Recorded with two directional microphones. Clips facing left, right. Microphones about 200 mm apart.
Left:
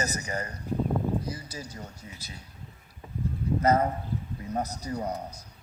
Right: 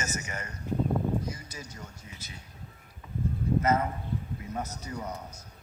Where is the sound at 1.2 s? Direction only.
35° left (ahead or behind).